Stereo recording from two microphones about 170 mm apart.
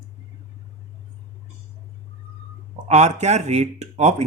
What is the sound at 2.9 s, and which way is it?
Speech, 40° right (ahead or behind).